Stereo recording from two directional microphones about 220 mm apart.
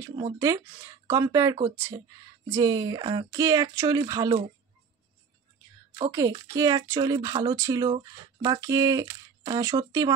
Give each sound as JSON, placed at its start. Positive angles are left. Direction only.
{"t": 0.2, "sound": "speech", "side_deg": -15}
{"t": 6.1, "sound": "speech", "side_deg": -15}